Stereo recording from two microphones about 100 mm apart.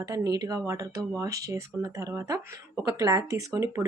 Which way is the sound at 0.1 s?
35° right (ahead or behind).